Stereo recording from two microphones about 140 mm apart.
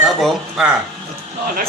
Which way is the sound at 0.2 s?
5° right (ahead or behind).